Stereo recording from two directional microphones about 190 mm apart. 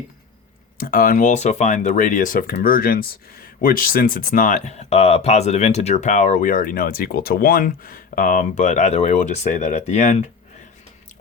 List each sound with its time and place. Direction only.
0.8 s speech: 50° left (ahead or behind)